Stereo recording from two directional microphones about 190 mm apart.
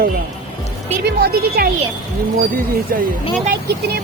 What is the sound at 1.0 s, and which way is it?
Speech, 55° right (ahead or behind).